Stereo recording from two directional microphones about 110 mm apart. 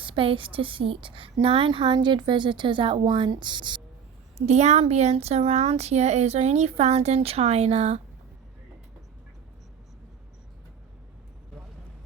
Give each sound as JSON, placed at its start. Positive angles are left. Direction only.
{"t": 0.0, "sound": "a woman's voice", "side_deg": -50}
{"t": 4.4, "sound": "speech", "side_deg": -90}